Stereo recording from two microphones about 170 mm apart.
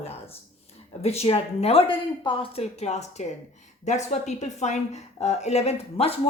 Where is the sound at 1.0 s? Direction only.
40° left (ahead or behind).